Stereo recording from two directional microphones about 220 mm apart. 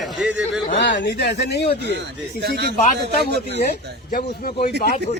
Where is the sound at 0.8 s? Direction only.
55° left (ahead or behind).